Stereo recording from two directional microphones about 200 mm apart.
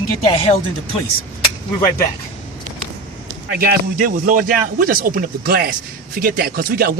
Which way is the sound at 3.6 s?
45° right (ahead or behind).